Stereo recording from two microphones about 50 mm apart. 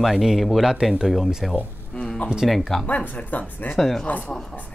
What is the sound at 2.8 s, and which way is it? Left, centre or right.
Speech, left.